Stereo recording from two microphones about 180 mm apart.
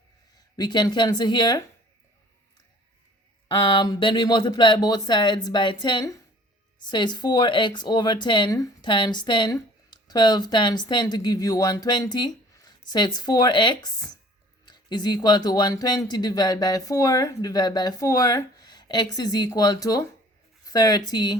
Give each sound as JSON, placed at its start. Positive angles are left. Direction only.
{"t": 0.5, "sound": "speech", "side_deg": 25}
{"t": 3.5, "sound": "speech", "side_deg": 25}